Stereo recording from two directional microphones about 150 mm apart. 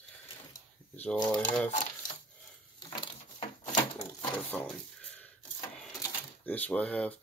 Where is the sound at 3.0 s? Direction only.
30° left (ahead or behind).